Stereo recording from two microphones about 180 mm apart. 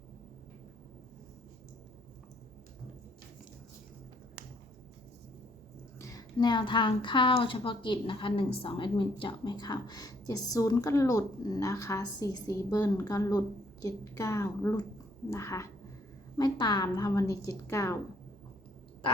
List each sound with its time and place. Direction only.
6.0 s a woman's voice: 20° left (ahead or behind)